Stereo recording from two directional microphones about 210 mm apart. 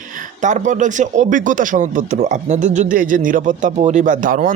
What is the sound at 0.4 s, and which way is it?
Speech, 35° right (ahead or behind).